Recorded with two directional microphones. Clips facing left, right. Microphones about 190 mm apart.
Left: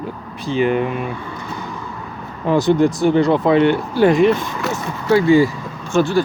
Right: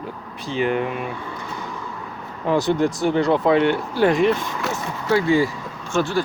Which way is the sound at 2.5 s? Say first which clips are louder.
Left 5 dB; 5° right (ahead or behind).